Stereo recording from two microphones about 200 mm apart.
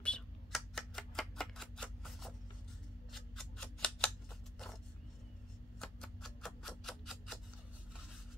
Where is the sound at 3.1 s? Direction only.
Centre (ahead or behind).